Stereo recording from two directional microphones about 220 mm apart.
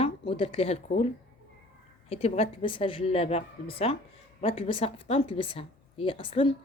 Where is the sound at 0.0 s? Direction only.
25° left (ahead or behind).